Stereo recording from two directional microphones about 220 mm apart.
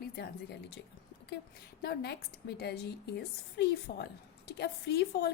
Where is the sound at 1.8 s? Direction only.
45° left (ahead or behind).